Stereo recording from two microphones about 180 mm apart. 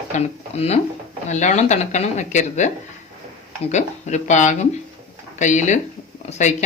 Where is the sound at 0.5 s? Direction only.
35° left (ahead or behind).